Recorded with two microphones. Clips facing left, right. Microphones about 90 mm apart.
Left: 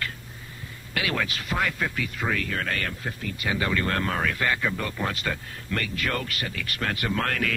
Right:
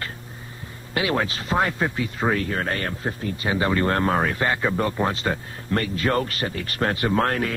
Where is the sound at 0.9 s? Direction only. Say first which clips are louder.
Right 5 dB; 30° right (ahead or behind).